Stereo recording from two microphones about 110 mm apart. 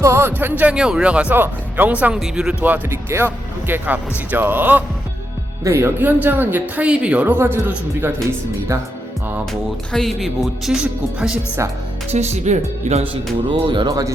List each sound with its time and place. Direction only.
0.0 s a man's voice: 25° right (ahead or behind)
9.9 s speech: centre (ahead or behind)
12.1 s speech: 85° right
13.5 s speech: 45° right (ahead or behind)
13.8 s speech: 30° right (ahead or behind)